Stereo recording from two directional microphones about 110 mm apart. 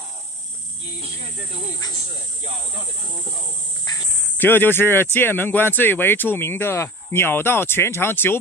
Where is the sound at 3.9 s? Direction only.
40° left (ahead or behind).